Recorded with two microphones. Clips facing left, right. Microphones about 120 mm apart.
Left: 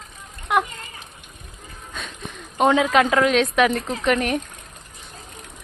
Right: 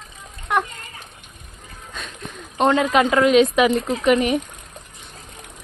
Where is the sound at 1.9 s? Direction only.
Centre (ahead or behind).